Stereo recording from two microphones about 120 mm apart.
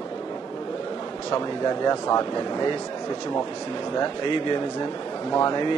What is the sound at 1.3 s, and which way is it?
Speech, 35° left (ahead or behind).